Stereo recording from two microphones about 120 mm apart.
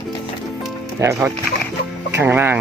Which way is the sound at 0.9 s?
25° right (ahead or behind).